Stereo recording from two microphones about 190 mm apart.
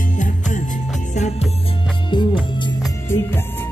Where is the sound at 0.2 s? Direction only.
40° left (ahead or behind).